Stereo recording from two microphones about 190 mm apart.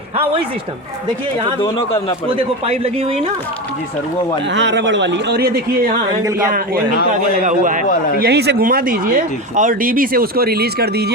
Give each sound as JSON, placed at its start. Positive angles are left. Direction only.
{"t": 2.3, "sound": "speech", "side_deg": -30}
{"t": 4.5, "sound": "speech", "side_deg": -65}
{"t": 7.4, "sound": "speech", "side_deg": -45}
{"t": 8.2, "sound": "speech", "side_deg": -60}